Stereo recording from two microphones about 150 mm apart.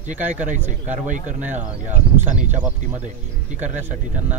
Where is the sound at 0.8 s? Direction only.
55° right (ahead or behind).